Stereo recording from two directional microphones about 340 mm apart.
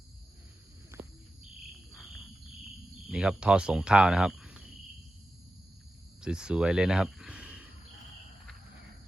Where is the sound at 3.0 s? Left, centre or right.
Centre.